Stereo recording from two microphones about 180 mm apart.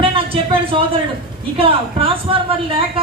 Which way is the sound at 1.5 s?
30° right (ahead or behind).